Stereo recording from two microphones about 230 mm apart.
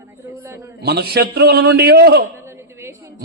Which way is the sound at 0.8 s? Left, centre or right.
Right.